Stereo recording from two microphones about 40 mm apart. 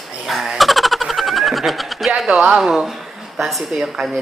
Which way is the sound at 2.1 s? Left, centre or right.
Centre.